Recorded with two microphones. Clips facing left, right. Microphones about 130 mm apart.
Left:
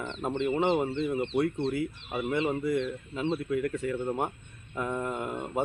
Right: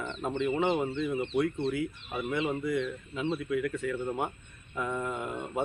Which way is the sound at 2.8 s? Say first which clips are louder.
Left 1 dB; 30° left (ahead or behind).